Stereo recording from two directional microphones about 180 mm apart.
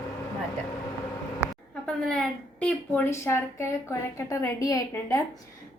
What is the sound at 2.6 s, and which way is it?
A woman's voice, 10° left (ahead or behind).